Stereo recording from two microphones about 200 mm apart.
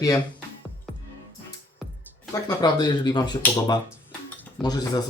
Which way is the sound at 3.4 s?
10° left (ahead or behind).